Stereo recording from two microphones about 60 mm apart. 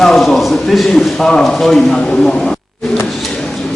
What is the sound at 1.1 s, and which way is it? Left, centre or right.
A man's voice, centre.